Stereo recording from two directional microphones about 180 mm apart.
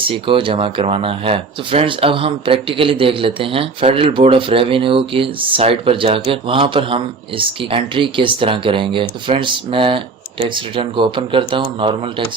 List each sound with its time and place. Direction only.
0.0 s speech: 30° right (ahead or behind)